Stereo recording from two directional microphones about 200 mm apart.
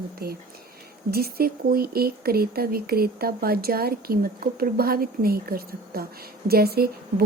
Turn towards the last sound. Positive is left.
turn(degrees=-50)  # may be behind; listen again after turning